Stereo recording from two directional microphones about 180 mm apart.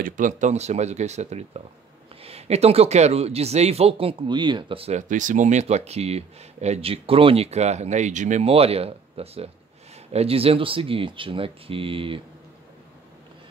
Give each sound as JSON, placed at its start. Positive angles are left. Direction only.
{"t": 0.0, "sound": "speech", "side_deg": -45}